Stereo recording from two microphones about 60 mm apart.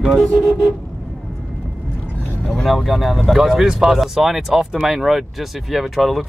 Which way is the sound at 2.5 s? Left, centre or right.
Centre.